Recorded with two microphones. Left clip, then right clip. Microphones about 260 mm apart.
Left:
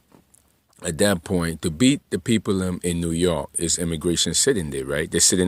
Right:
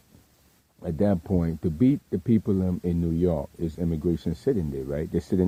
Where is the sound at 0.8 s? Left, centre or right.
Centre.